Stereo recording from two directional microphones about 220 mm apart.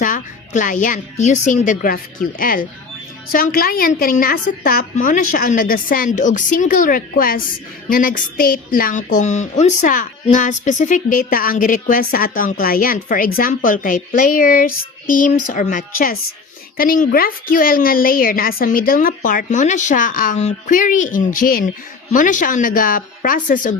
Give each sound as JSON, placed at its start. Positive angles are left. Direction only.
{"t": 0.0, "sound": "speech", "side_deg": 35}